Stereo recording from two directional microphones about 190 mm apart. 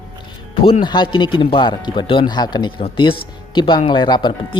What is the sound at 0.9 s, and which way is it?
Speech, 25° left (ahead or behind).